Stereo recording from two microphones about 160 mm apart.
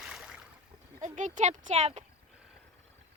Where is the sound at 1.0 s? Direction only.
50° right (ahead or behind).